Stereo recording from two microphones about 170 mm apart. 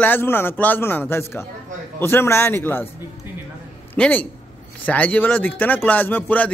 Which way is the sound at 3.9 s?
10° left (ahead or behind).